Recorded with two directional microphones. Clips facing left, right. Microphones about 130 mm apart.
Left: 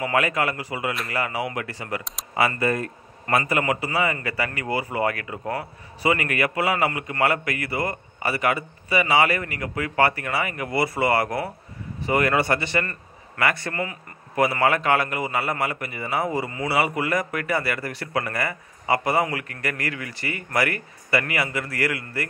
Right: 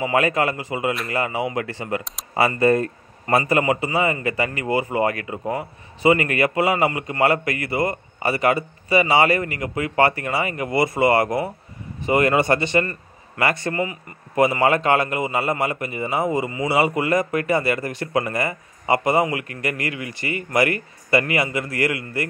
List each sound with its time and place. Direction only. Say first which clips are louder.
0.0 s a man's voice: right 3 dB; 25° right (ahead or behind)